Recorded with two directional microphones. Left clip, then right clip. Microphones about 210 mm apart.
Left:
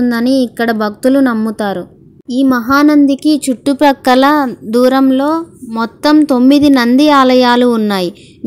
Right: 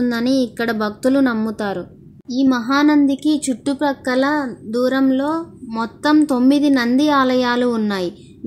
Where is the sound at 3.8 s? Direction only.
40° left (ahead or behind).